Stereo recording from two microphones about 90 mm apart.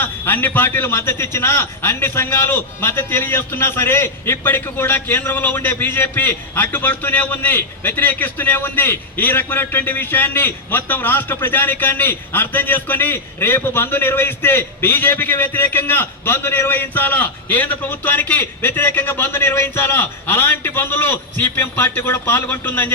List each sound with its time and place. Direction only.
0.0 s a man's voice: 20° left (ahead or behind)